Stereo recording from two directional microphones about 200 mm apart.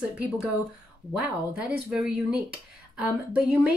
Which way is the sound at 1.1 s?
5° right (ahead or behind).